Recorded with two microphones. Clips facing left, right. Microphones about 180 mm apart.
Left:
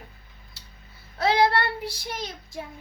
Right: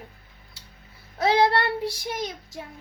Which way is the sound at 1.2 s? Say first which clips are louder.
Right 1 dB; 20° right (ahead or behind).